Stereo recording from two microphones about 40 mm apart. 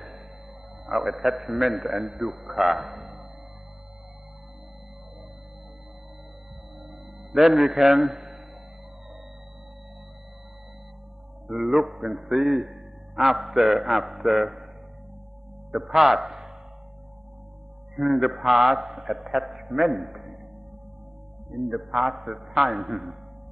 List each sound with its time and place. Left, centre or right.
0.8 s a man's voice: centre
7.3 s a man's voice: centre
11.4 s a man's voice: centre
15.7 s a man's voice: centre
17.9 s a man's voice: centre
21.5 s a man's voice: centre